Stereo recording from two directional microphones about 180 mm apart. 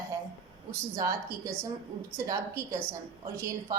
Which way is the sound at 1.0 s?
20° right (ahead or behind).